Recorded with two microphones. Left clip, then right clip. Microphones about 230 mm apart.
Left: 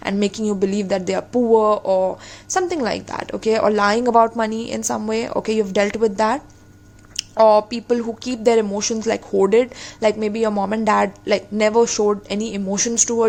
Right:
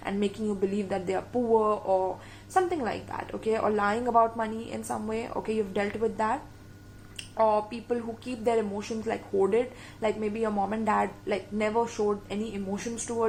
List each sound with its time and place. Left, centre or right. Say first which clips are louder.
0.0 s speech: left 9 dB; left